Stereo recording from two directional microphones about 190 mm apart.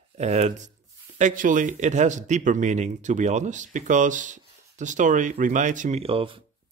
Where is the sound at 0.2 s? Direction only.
35° right (ahead or behind).